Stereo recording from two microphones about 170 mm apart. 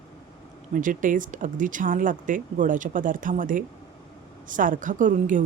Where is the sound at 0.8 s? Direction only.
50° right (ahead or behind).